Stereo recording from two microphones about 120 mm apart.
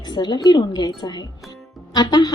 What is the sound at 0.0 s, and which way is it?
Speech, 40° left (ahead or behind).